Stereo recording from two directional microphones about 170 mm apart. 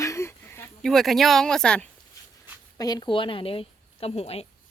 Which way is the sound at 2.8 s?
25° left (ahead or behind).